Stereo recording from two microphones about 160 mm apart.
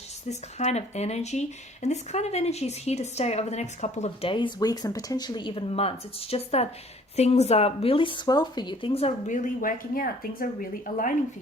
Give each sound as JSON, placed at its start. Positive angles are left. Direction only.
{"t": 0.3, "sound": "speech", "side_deg": 45}